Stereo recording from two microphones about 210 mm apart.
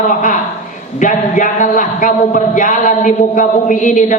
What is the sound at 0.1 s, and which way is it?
A man's voice, 40° left (ahead or behind).